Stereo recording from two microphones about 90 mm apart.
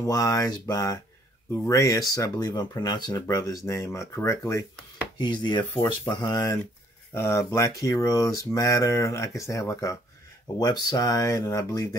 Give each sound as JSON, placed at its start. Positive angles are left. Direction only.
{"t": 0.0, "sound": "speech", "side_deg": 35}
{"t": 5.2, "sound": "chopping", "side_deg": 55}
{"t": 5.8, "sound": "speech", "side_deg": 40}
{"t": 7.2, "sound": "speech", "side_deg": 30}
{"t": 7.9, "sound": "speech", "side_deg": 45}
{"t": 10.6, "sound": "speech", "side_deg": 45}